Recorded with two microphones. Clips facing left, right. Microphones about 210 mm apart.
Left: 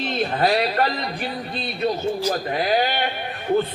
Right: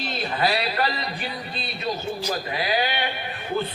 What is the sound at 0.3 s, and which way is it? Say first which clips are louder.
Speech: left 3 dB; 50° left (ahead or behind).